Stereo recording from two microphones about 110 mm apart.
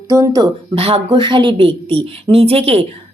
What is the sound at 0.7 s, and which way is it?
A woman's voice, 55° right (ahead or behind).